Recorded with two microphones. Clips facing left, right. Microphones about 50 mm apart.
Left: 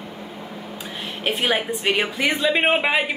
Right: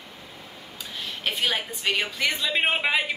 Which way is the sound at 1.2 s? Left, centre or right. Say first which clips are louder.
Left 5 dB; left.